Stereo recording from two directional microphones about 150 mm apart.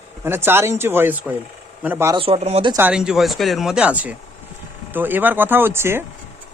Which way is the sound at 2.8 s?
10° right (ahead or behind).